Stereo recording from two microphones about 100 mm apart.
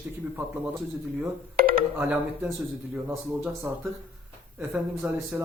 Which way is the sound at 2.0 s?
15° right (ahead or behind).